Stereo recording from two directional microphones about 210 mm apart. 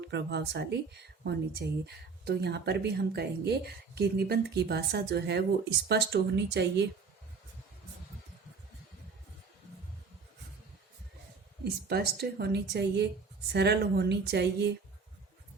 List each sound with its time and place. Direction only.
0.1 s speech: 55° right (ahead or behind)
11.6 s speech: 50° right (ahead or behind)